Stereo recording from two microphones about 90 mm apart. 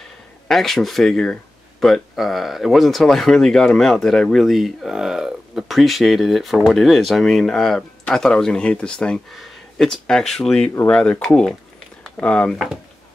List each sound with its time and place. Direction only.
0.5 s speech: centre (ahead or behind)